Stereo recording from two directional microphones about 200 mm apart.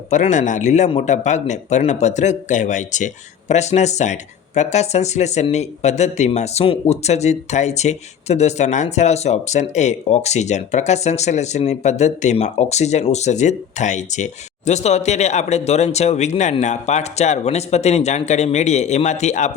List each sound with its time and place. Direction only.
0.1 s speech: 35° left (ahead or behind)